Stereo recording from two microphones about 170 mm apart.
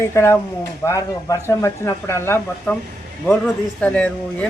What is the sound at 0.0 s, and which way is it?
A man's voice, 15° left (ahead or behind).